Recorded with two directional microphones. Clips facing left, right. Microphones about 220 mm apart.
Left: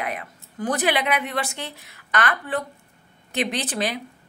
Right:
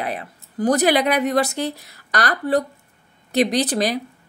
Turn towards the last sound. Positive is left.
turn(degrees=-40)  # may be behind; listen again after turning